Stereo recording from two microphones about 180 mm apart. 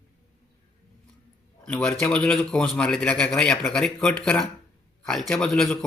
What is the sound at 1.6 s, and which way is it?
A man's voice, 5° left (ahead or behind).